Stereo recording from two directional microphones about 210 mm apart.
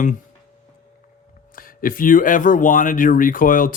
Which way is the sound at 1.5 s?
40° left (ahead or behind).